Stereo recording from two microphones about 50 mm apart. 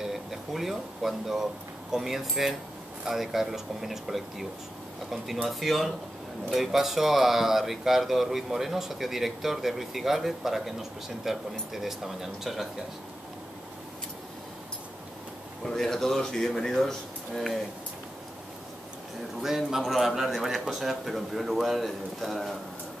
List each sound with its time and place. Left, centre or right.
0.0 s speech: centre
15.6 s speech: centre
19.4 s speech: centre